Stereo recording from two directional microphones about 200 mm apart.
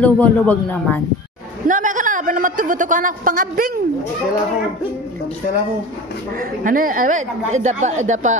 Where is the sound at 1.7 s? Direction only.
40° right (ahead or behind).